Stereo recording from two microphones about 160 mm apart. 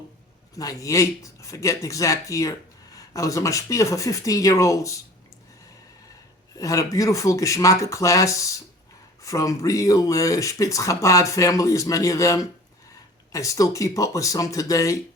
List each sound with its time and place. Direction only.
0.5 s speech: 20° left (ahead or behind)
6.6 s speech: 20° left (ahead or behind)